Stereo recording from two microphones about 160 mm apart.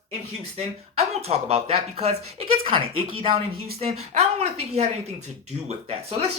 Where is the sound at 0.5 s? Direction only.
40° right (ahead or behind).